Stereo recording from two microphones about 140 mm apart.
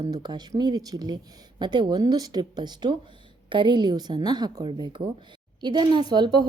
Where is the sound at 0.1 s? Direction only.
30° right (ahead or behind).